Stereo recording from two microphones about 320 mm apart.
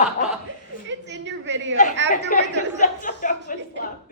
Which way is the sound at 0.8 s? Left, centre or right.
Right.